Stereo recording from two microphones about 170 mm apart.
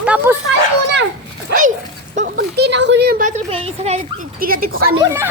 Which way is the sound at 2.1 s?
55° right (ahead or behind).